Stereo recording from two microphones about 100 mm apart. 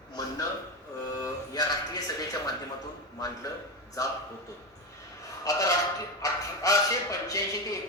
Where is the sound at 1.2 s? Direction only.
40° left (ahead or behind).